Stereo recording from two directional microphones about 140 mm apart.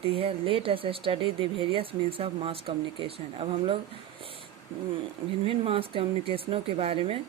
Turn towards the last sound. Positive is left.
turn(degrees=-45)  # may be behind; listen again after turning